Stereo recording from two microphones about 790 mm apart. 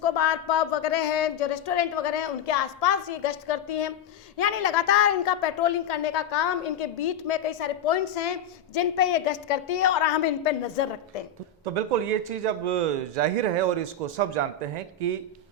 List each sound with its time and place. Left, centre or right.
0.0 s a woman's voice: left
11.6 s speech: right